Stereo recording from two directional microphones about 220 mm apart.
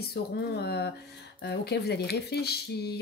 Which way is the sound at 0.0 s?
45° left (ahead or behind).